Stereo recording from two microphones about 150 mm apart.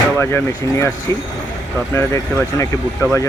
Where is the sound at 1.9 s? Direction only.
15° left (ahead or behind).